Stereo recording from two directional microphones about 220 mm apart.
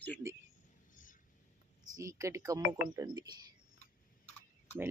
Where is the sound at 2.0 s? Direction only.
15° right (ahead or behind).